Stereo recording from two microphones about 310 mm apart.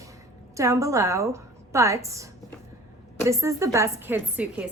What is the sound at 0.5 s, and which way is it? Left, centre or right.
A woman's voice, centre.